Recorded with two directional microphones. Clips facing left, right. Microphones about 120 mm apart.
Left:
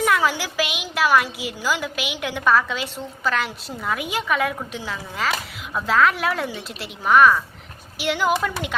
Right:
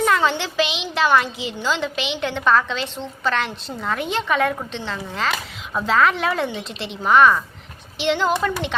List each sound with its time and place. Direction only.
0.0 s a woman's voice: 5° left (ahead or behind)